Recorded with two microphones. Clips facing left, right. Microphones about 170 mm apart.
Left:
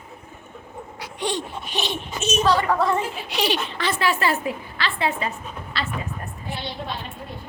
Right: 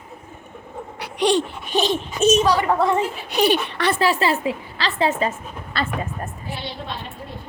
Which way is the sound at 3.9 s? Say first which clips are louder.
Right 2 dB; 35° right (ahead or behind).